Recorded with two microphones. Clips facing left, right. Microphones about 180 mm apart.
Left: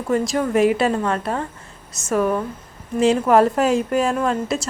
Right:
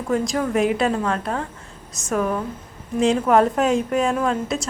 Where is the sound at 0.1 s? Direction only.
Centre (ahead or behind).